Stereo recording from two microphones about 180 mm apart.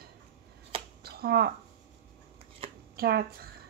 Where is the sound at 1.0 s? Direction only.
60° right (ahead or behind).